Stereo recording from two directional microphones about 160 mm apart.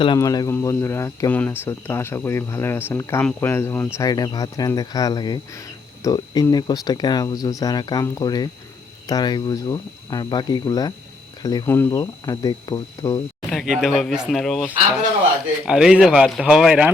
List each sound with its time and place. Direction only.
0.2 s speech: 20° left (ahead or behind)
13.5 s speech: centre (ahead or behind)